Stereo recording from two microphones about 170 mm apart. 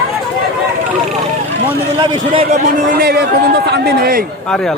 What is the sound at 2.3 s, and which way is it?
Speech, 35° right (ahead or behind).